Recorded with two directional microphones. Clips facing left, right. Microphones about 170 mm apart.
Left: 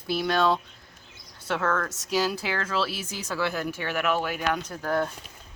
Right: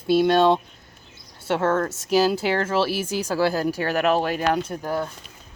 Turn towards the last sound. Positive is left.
turn(degrees=-20)  # may be behind; listen again after turning